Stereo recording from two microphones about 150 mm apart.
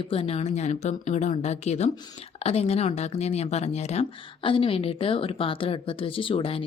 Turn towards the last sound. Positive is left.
turn(degrees=35)  # may be behind; listen again after turning